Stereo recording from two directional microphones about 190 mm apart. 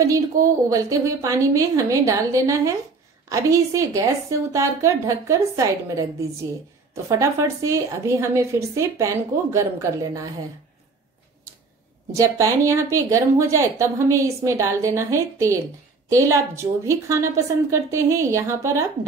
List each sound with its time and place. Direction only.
0.7 s speech: 15° right (ahead or behind)
12.1 s speech: 15° right (ahead or behind)